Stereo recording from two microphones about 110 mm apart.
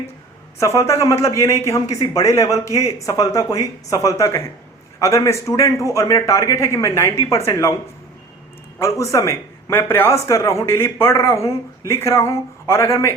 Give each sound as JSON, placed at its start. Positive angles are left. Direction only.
{"t": 0.6, "sound": "speech", "side_deg": 25}
{"t": 8.8, "sound": "speech", "side_deg": 30}